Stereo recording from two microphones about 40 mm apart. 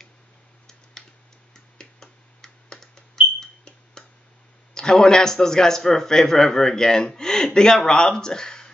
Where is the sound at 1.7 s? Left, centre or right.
Centre.